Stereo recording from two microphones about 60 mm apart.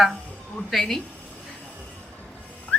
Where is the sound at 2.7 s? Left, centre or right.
Left.